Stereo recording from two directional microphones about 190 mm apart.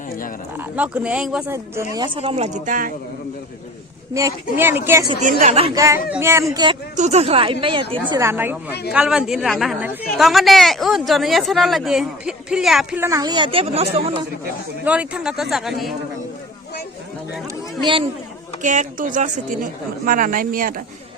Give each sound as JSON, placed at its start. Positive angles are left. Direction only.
{"t": 0.5, "sound": "speech", "side_deg": -5}
{"t": 1.5, "sound": "a child's voice", "side_deg": -15}
{"t": 2.1, "sound": "speech", "side_deg": -30}
{"t": 4.1, "sound": "a child's voice", "side_deg": -15}
{"t": 5.2, "sound": "speech", "side_deg": -45}
{"t": 5.7, "sound": "a child's voice", "side_deg": -15}
{"t": 6.9, "sound": "a woman's voice", "side_deg": -35}
{"t": 8.1, "sound": "a child's voice", "side_deg": -15}
{"t": 13.0, "sound": "a woman's voice", "side_deg": -15}
{"t": 14.8, "sound": "speech", "side_deg": -5}
{"t": 17.7, "sound": "speech", "side_deg": -25}
{"t": 18.6, "sound": "speech", "side_deg": -40}